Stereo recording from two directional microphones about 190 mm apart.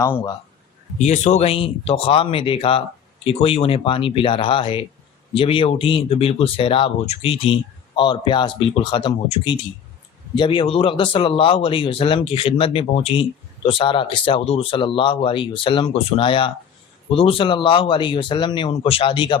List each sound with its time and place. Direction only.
0.9 s speech: 35° left (ahead or behind)